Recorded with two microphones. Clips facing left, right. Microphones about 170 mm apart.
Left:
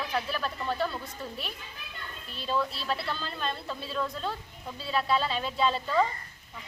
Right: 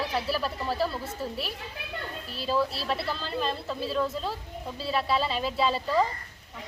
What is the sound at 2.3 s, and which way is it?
A woman's voice, 5° right (ahead or behind).